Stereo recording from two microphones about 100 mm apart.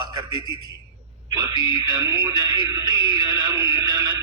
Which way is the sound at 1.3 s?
35° right (ahead or behind).